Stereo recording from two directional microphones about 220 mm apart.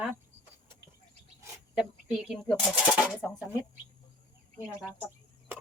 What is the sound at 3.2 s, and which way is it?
Speech, centre (ahead or behind).